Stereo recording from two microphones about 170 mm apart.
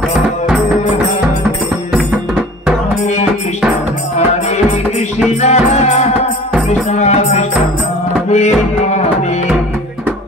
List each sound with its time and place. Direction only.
5.4 s music: 40° left (ahead or behind)